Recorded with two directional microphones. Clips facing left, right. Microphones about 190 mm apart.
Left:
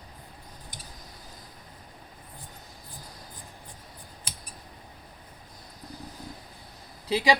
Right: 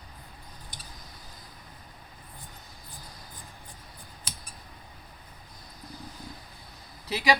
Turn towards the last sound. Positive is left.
turn(degrees=20)  # may be behind; listen again after turning